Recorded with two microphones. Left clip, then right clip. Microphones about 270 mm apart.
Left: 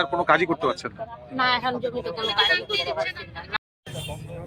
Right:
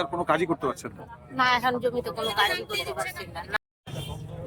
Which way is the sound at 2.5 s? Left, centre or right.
Right.